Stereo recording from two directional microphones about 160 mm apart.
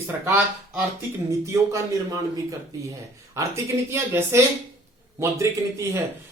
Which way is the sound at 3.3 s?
15° right (ahead or behind).